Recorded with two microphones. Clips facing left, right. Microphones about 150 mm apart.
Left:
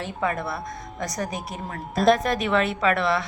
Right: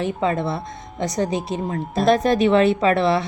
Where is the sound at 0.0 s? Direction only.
25° right (ahead or behind).